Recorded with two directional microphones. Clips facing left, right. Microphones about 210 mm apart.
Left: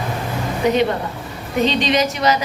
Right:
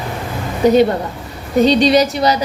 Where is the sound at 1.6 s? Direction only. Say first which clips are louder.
Right 6 dB; 35° right (ahead or behind).